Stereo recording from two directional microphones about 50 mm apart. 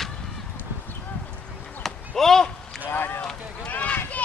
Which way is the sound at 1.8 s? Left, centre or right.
Centre.